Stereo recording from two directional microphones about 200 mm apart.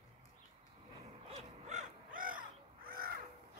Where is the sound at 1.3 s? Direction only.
35° right (ahead or behind).